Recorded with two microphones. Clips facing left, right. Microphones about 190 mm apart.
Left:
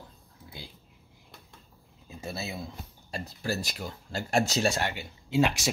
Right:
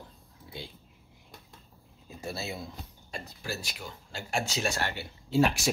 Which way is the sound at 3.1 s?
40° left (ahead or behind).